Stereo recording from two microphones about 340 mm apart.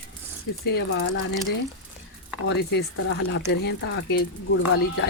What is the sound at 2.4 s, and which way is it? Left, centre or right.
Speech, left.